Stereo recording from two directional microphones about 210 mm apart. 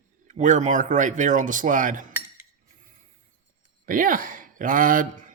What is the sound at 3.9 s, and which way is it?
Speech, 40° right (ahead or behind).